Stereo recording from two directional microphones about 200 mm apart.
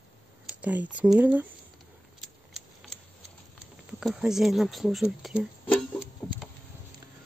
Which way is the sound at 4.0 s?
Centre (ahead or behind).